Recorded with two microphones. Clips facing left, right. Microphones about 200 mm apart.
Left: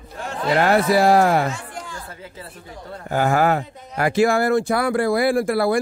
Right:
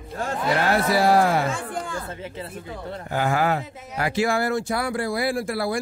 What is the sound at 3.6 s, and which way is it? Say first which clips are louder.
Speech: even; 5° right (ahead or behind).